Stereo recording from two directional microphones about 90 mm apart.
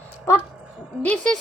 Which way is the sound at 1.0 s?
15° left (ahead or behind).